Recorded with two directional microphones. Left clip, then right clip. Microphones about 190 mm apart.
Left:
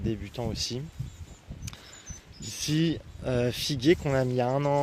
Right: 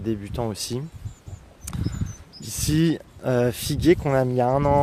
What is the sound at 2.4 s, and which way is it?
Speech, 10° right (ahead or behind).